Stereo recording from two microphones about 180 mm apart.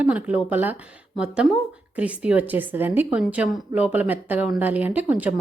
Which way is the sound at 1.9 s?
5° right (ahead or behind).